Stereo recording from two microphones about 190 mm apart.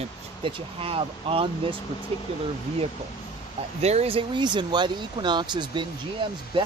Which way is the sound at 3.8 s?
35° right (ahead or behind).